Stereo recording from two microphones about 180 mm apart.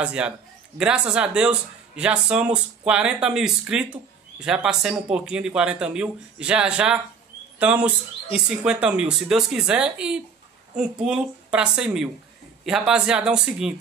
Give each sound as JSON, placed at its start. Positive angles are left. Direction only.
{"t": 0.0, "sound": "a man's voice", "side_deg": -5}